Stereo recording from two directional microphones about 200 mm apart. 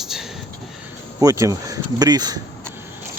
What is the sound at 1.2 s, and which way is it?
Speech, 15° right (ahead or behind).